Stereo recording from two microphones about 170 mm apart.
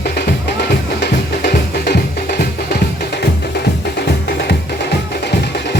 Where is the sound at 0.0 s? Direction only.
75° left (ahead or behind).